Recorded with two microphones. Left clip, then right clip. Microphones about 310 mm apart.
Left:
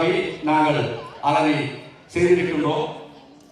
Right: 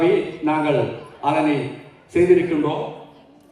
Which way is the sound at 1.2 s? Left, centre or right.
Left.